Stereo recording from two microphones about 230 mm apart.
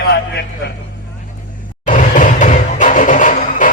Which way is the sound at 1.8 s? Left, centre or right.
Left.